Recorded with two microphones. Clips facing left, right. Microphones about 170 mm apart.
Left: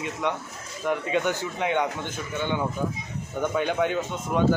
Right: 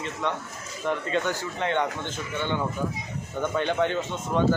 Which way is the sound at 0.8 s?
15° left (ahead or behind).